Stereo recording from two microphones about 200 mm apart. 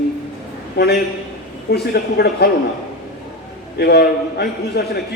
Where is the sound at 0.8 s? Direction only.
55° left (ahead or behind).